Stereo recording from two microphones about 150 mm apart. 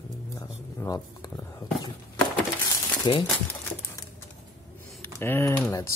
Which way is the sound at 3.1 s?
35° left (ahead or behind).